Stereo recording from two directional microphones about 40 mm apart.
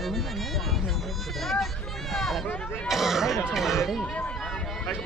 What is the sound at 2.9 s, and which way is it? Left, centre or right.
Speech, centre.